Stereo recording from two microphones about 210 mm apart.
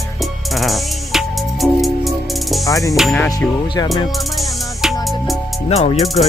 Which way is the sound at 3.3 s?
20° left (ahead or behind).